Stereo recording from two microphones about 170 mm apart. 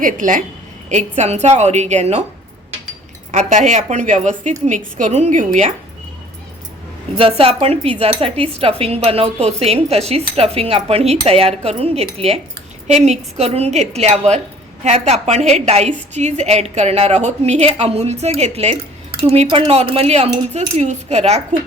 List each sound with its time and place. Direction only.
0.0 s a woman's voice: 50° right (ahead or behind)
3.3 s a woman's voice: 45° right (ahead or behind)
7.2 s cutlery: 35° right (ahead or behind)